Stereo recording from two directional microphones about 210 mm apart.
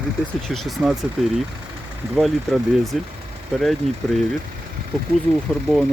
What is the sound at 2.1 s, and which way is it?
Speech, centre (ahead or behind).